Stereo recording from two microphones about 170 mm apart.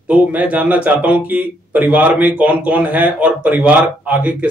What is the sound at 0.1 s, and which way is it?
Speech, 10° right (ahead or behind).